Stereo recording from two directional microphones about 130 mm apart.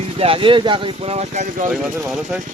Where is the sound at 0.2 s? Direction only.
45° right (ahead or behind).